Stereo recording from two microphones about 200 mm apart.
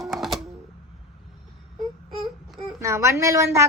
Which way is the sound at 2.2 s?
Centre (ahead or behind).